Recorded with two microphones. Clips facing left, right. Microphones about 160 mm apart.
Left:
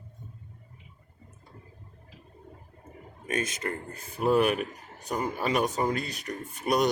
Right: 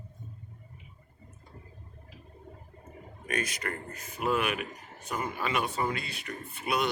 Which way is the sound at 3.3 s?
25° left (ahead or behind).